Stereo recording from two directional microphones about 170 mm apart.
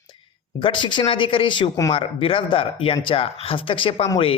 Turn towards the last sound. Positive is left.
turn(degrees=30)  # may be behind; listen again after turning